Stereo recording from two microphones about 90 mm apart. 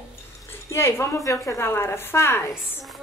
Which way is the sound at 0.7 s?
30° left (ahead or behind).